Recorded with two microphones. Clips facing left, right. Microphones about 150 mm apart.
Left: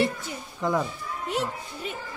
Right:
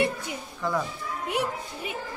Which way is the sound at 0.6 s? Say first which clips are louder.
Left 3 dB; 20° left (ahead or behind).